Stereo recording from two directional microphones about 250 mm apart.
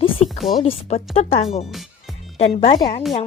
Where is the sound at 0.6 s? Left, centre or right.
Left.